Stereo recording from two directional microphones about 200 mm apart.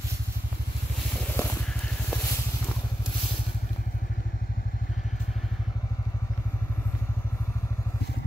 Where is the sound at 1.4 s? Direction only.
10° left (ahead or behind).